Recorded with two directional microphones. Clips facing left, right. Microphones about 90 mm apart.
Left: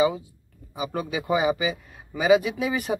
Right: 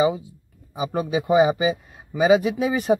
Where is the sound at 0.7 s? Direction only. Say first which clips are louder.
Right 5 dB; 25° right (ahead or behind).